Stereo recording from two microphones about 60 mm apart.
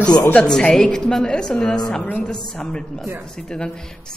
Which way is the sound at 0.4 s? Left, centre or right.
Centre.